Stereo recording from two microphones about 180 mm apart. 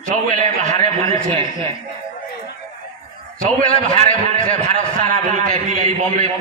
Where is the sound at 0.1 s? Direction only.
45° right (ahead or behind).